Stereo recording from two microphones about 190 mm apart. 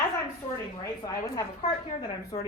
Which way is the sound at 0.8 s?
20° left (ahead or behind).